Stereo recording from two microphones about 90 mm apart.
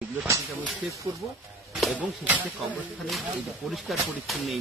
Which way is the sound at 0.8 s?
5° right (ahead or behind).